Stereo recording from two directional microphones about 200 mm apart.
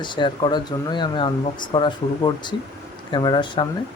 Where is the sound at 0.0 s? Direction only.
25° left (ahead or behind).